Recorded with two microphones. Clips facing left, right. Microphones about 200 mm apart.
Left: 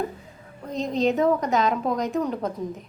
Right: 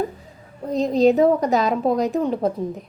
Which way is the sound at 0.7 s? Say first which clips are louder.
Right 7 dB; 35° right (ahead or behind).